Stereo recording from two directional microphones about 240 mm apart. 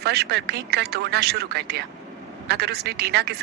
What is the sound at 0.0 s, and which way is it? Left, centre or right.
A woman's voice, right.